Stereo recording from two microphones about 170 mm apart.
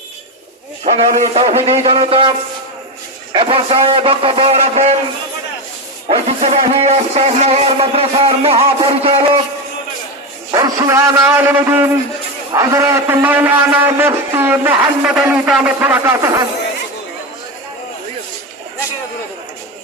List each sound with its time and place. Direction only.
0.9 s a man's voice: 40° right (ahead or behind)
3.3 s a man's voice: 30° right (ahead or behind)
6.1 s a man's voice: 35° right (ahead or behind)
10.5 s a man's voice: 20° right (ahead or behind)